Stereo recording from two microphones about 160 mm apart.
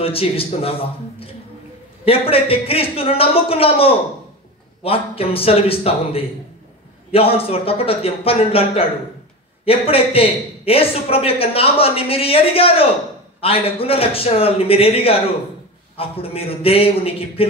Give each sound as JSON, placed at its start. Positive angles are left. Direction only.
{"t": 0.0, "sound": "a man's voice", "side_deg": 35}